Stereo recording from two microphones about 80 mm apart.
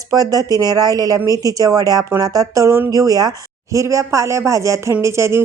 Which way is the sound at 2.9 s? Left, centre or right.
Right.